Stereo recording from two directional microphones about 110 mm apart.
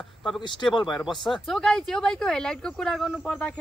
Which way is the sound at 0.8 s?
Centre (ahead or behind).